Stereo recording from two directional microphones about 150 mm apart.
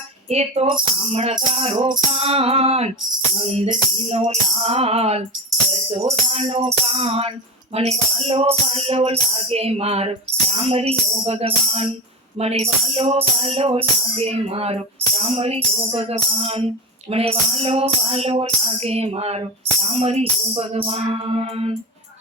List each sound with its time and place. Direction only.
0.3 s speech: 45° right (ahead or behind)